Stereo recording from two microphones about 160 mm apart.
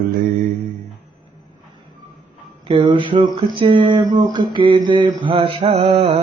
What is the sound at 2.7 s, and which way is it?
Speech, 30° right (ahead or behind).